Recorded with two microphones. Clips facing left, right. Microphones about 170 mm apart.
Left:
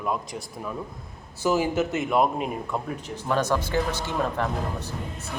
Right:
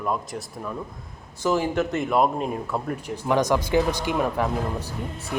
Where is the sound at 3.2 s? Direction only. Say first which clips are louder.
Right 3 dB; 15° right (ahead or behind).